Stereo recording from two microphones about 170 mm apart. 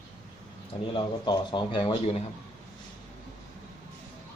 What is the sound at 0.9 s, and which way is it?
A man's voice, 25° left (ahead or behind).